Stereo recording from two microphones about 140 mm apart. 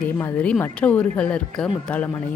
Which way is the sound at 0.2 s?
15° left (ahead or behind).